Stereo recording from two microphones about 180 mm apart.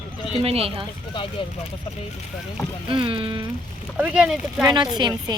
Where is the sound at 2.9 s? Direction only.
30° right (ahead or behind).